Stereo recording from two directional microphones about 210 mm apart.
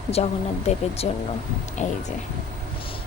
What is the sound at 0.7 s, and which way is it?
A woman's voice, 30° left (ahead or behind).